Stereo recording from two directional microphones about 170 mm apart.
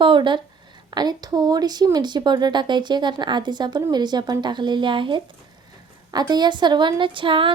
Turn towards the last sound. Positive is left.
turn(degrees=-30)  # may be behind; listen again after turning